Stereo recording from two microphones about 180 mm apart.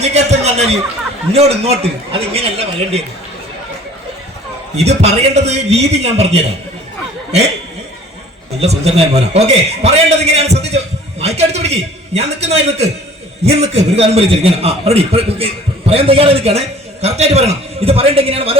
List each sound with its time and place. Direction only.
0.0 s a man's voice: 35° right (ahead or behind)
4.8 s a man's voice: 35° right (ahead or behind)
8.6 s a man's voice: 35° right (ahead or behind)